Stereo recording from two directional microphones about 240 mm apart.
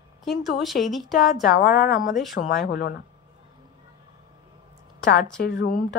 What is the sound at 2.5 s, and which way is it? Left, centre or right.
Speech, left.